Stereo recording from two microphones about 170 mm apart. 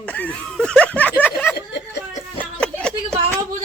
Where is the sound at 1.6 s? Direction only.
85° left.